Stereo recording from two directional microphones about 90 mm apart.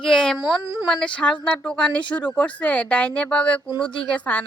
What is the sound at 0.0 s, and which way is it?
A woman's voice, 10° left (ahead or behind).